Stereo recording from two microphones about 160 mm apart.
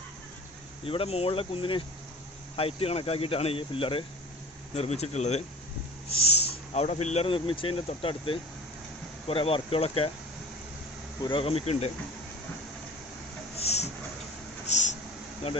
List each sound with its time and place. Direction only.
0.9 s speech: 35° left (ahead or behind)
6.7 s speech: 45° left (ahead or behind)
11.2 s speech: 30° left (ahead or behind)
13.6 s a sound: 40° left (ahead or behind)